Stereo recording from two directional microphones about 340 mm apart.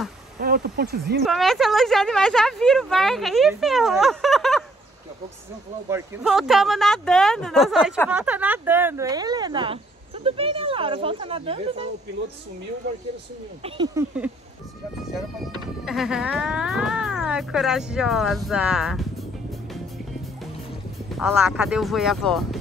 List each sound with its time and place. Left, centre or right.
0.4 s speech: right
1.2 s speech: centre
5.9 s speech: centre
13.6 s speech: centre
15.8 s speech: centre
21.2 s speech: centre